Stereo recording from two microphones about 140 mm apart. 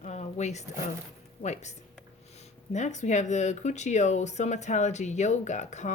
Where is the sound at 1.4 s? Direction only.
55° left (ahead or behind).